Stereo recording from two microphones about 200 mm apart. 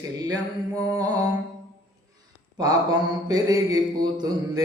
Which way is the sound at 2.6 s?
20° right (ahead or behind).